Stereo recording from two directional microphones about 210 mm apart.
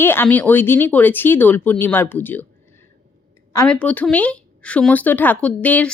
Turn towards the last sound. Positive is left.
turn(degrees=5)  # may be behind; listen again after turning